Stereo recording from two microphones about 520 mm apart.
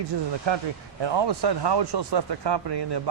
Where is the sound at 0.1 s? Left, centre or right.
Right.